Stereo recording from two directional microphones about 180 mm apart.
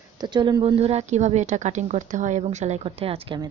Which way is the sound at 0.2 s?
25° right (ahead or behind).